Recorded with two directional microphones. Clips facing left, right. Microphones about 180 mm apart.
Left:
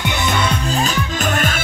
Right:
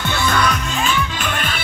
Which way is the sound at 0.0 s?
20° left (ahead or behind).